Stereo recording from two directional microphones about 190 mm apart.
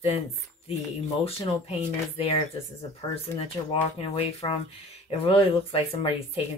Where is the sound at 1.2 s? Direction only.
30° left (ahead or behind).